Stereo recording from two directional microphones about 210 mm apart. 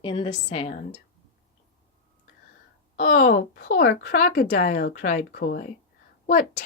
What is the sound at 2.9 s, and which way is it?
A woman's voice, 40° left (ahead or behind).